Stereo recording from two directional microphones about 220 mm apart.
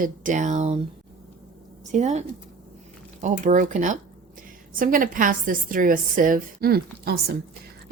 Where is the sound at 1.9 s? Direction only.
30° right (ahead or behind).